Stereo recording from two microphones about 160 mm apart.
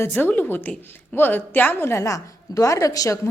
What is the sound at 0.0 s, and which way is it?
A woman's voice, 10° left (ahead or behind).